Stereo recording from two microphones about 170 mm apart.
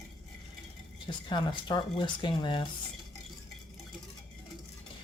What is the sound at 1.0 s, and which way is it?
Speech, 25° left (ahead or behind).